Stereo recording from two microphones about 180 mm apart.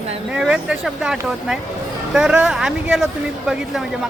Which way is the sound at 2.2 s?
5° right (ahead or behind).